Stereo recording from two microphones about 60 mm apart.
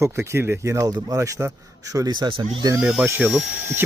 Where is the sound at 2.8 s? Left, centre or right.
Centre.